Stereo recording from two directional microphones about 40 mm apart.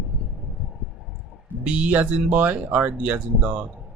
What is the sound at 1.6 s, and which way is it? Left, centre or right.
Speech, right.